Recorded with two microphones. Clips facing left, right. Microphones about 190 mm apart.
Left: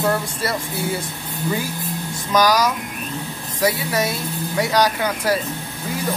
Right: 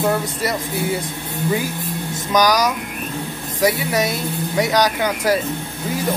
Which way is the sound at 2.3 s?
20° right (ahead or behind).